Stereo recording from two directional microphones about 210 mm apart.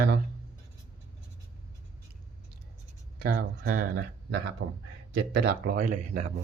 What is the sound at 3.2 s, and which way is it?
Speech, 45° right (ahead or behind).